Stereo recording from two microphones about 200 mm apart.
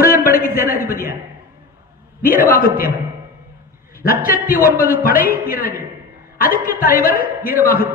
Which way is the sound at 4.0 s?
45° left (ahead or behind).